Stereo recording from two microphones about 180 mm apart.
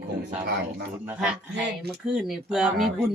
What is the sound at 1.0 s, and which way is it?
Speech, 10° right (ahead or behind).